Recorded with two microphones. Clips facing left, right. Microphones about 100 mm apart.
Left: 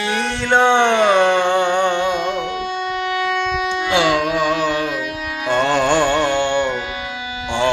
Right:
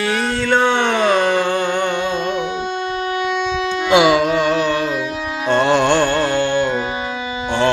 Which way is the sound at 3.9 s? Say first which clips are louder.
Right 5 dB; 15° right (ahead or behind).